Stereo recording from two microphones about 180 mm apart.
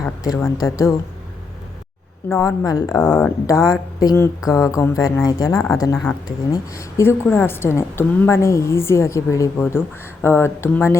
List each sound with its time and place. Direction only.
0.0 s a woman's voice: 15° left (ahead or behind)
2.3 s a woman's voice: 15° left (ahead or behind)